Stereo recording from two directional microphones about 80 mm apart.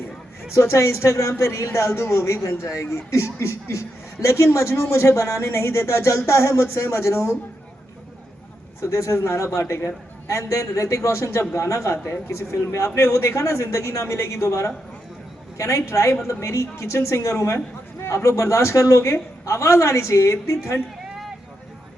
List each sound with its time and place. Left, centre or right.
0.5 s speech: left
8.8 s speech: left